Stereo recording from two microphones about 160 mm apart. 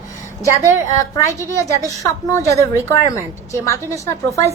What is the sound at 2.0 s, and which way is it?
A woman's voice, 20° left (ahead or behind).